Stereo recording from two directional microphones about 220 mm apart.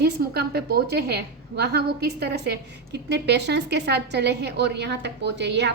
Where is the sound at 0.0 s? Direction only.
45° right (ahead or behind).